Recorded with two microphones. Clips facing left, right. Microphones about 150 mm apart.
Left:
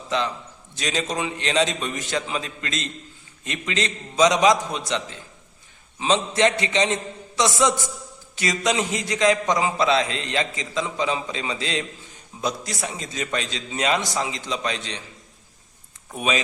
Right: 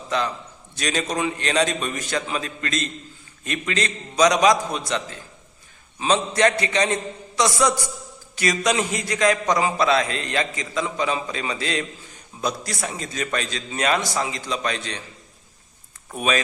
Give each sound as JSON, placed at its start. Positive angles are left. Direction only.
{"t": 0.8, "sound": "a man's voice", "side_deg": 20}
{"t": 16.1, "sound": "a man's voice", "side_deg": 20}